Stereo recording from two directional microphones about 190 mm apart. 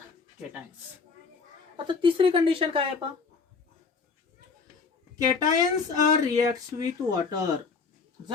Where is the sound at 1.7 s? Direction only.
25° right (ahead or behind).